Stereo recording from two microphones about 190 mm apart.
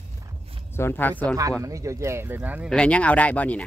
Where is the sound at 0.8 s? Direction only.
10° left (ahead or behind).